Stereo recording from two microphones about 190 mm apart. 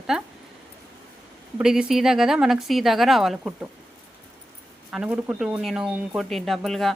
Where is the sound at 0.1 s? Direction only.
Centre (ahead or behind).